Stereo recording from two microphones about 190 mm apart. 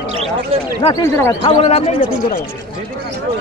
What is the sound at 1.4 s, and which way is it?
Speech, 30° left (ahead or behind).